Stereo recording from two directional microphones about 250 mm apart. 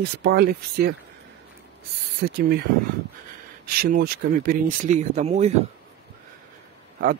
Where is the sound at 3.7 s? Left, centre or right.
Right.